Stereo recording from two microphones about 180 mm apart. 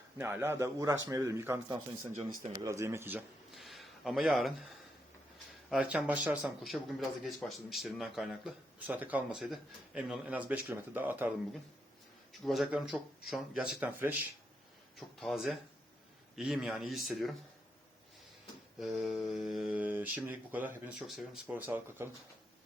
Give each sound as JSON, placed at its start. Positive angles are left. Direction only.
{"t": 0.2, "sound": "speech", "side_deg": -15}
{"t": 3.5, "sound": "a sound", "side_deg": 0}
{"t": 5.7, "sound": "speech", "side_deg": -5}
{"t": 12.3, "sound": "speech", "side_deg": 0}
{"t": 14.9, "sound": "speech", "side_deg": 0}
{"t": 18.8, "sound": "speech", "side_deg": 0}